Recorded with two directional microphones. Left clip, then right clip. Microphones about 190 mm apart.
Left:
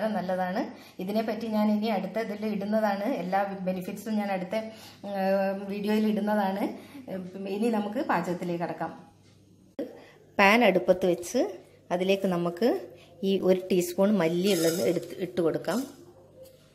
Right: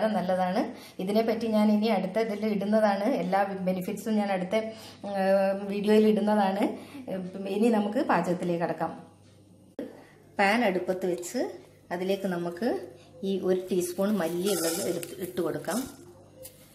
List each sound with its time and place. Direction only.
0.0 s a woman's voice: 5° right (ahead or behind)
10.3 s a woman's voice: 25° left (ahead or behind)